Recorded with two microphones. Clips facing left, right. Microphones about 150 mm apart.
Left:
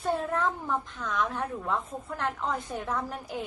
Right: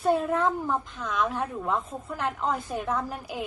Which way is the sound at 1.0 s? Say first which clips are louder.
Right 3 dB; 15° right (ahead or behind).